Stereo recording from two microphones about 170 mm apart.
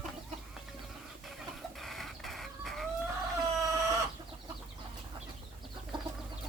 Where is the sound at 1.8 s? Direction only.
Centre (ahead or behind).